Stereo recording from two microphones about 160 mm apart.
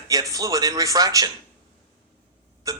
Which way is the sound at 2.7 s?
20° right (ahead or behind).